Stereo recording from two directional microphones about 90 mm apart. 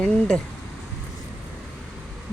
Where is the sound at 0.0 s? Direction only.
5° left (ahead or behind).